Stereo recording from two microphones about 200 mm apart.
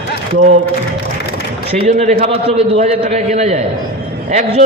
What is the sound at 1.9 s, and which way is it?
A man's voice, 35° right (ahead or behind).